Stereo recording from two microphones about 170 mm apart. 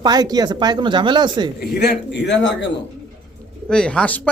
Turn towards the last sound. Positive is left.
turn(degrees=10)  # may be behind; listen again after turning